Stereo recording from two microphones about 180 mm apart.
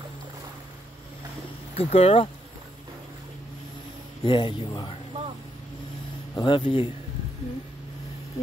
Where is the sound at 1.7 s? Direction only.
35° left (ahead or behind).